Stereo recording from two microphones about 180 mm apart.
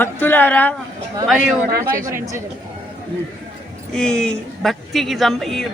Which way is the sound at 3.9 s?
5° left (ahead or behind).